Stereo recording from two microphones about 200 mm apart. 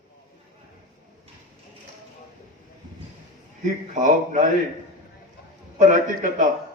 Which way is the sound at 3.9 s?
40° right (ahead or behind).